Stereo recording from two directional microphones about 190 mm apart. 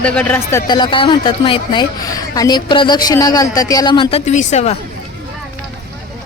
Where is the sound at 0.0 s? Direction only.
5° left (ahead or behind); by 4.8 s 35° left (ahead or behind).